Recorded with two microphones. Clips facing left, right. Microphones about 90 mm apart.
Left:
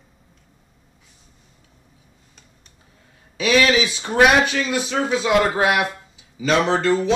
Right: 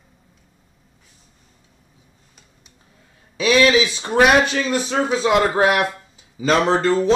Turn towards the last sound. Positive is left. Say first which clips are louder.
# right 1 dB
turn(degrees=-35)  # may be behind; listen again after turning